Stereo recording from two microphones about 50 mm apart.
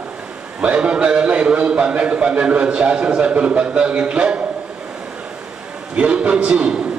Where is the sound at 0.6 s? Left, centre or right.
Right.